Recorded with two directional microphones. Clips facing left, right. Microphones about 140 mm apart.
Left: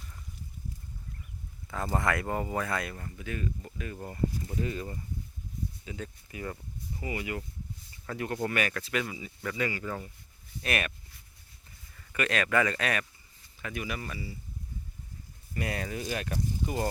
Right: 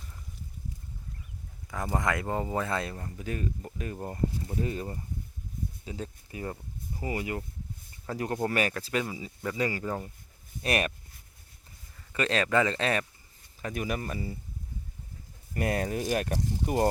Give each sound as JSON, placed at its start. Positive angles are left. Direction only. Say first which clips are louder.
{"t": 1.7, "sound": "speech", "louder": "even", "side_deg": -15}
{"t": 9.6, "sound": "speech", "louder": "right 3 dB", "side_deg": -40}
{"t": 12.1, "sound": "speech", "louder": "right 2 dB", "side_deg": -30}
{"t": 15.5, "sound": "speech", "louder": "right 5 dB", "side_deg": -45}